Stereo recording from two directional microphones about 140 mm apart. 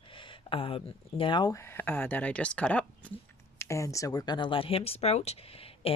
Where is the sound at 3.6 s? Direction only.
20° left (ahead or behind).